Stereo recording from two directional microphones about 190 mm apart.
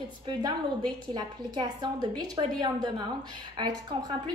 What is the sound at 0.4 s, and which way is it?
A woman's voice, 20° right (ahead or behind).